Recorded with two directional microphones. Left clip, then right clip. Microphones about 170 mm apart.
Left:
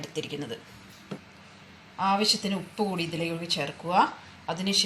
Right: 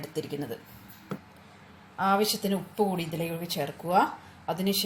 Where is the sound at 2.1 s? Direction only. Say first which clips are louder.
Left 1 dB; 65° right (ahead or behind).